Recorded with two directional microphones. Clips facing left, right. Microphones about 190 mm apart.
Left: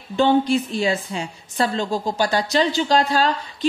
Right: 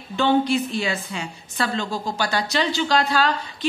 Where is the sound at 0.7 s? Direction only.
30° left (ahead or behind).